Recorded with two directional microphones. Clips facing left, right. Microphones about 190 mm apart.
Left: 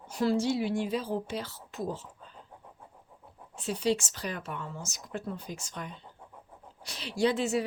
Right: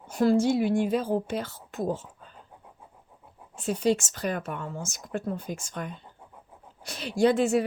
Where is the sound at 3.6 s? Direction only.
50° right (ahead or behind).